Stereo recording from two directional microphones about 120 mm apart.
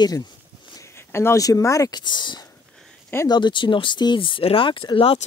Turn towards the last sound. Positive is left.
turn(degrees=45)  # may be behind; listen again after turning